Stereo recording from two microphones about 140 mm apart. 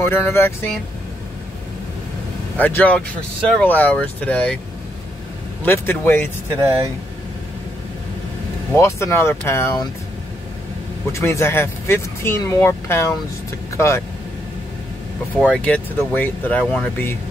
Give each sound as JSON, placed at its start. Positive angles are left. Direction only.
{"t": 0.0, "sound": "speech", "side_deg": 15}
{"t": 2.5, "sound": "speech", "side_deg": 10}
{"t": 5.6, "sound": "speech", "side_deg": 15}
{"t": 8.7, "sound": "speech", "side_deg": 20}
{"t": 11.1, "sound": "speech", "side_deg": 20}
{"t": 15.3, "sound": "speech", "side_deg": 5}